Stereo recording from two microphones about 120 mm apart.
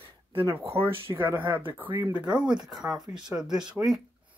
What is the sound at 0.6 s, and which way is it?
Speech, 50° right (ahead or behind).